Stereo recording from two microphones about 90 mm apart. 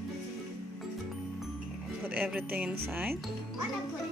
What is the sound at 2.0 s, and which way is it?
Speech, 15° right (ahead or behind).